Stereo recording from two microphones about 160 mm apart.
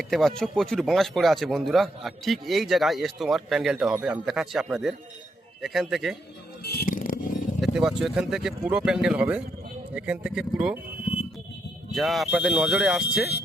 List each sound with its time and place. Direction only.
0.0 s speech: centre (ahead or behind)
6.6 s a sound: 75° left (ahead or behind)
7.6 s speech: 5° right (ahead or behind)
11.9 s speech: centre (ahead or behind)